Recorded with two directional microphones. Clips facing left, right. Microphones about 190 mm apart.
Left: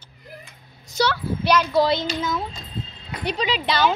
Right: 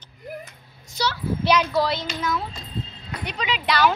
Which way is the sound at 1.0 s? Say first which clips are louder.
Left 5 dB; 45° left (ahead or behind).